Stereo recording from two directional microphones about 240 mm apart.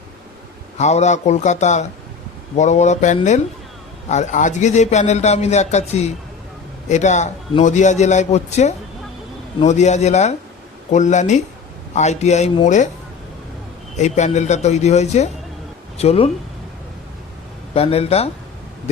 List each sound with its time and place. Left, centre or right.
0.8 s a man's voice: left
13.9 s a man's voice: left
17.7 s a man's voice: left